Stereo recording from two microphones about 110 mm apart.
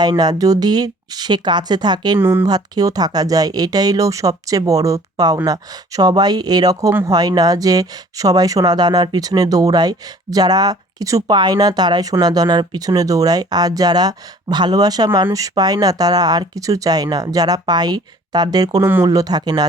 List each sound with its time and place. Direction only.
0.0 s speech: 40° right (ahead or behind)
2.1 s speech: 20° right (ahead or behind)
2.5 s speech: 35° right (ahead or behind)
18.8 s speech: 20° right (ahead or behind)
19.0 s speech: 35° right (ahead or behind)